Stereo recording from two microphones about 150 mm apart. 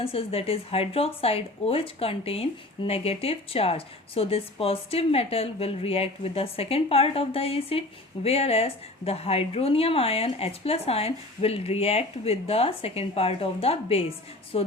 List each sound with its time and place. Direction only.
0.0 s speech: 40° left (ahead or behind)